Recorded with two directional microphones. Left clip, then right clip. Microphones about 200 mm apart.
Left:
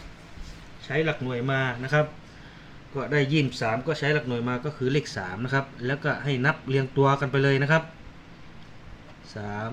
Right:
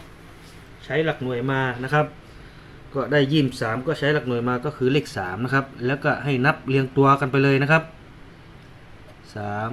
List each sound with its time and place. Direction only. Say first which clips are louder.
0.9 s speech: right 3 dB; centre (ahead or behind); by 7.8 s 20° right (ahead or behind)
9.3 s speech: right 6 dB; 15° right (ahead or behind)